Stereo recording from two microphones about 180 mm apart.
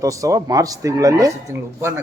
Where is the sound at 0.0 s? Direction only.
20° right (ahead or behind).